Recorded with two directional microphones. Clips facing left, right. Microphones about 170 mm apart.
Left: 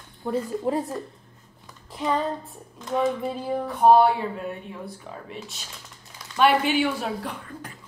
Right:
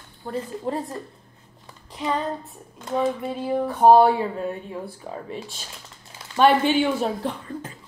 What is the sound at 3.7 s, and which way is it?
Speech, 35° right (ahead or behind).